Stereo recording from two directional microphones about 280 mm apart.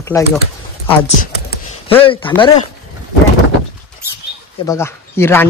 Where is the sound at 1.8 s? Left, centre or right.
Centre.